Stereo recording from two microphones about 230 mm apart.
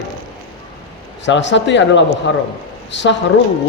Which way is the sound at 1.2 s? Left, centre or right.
Left.